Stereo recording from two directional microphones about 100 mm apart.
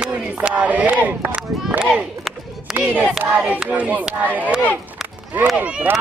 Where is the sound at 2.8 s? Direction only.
15° right (ahead or behind).